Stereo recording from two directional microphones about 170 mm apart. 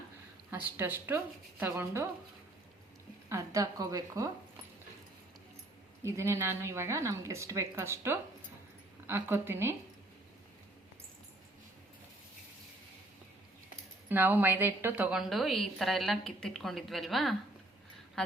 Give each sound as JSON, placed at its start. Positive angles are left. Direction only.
{"t": 0.5, "sound": "a woman's voice", "side_deg": -10}
{"t": 3.2, "sound": "speech", "side_deg": -15}
{"t": 6.0, "sound": "a woman's voice", "side_deg": -15}
{"t": 14.1, "sound": "a woman's voice", "side_deg": -10}